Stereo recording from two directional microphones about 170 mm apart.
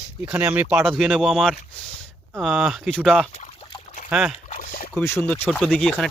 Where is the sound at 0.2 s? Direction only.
10° right (ahead or behind).